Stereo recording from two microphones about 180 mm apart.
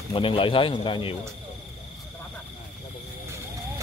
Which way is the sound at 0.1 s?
30° left (ahead or behind).